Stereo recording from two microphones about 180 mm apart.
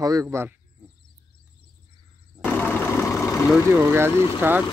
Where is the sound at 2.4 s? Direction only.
10° left (ahead or behind).